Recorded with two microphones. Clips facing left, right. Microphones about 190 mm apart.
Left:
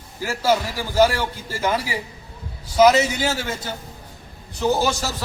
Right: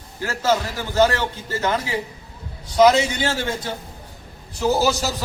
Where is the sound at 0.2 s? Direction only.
10° left (ahead or behind).